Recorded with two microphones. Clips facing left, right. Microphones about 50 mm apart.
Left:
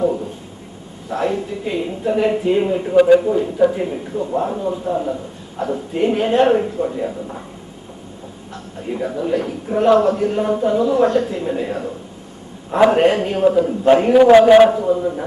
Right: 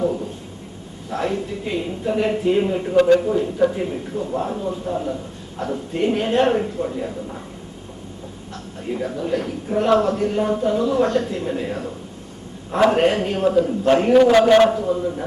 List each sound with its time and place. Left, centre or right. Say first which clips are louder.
1.1 s speech: left 3 dB; centre
8.8 s speech: left 3 dB; centre
12.9 s a man's voice: left 3 dB; centre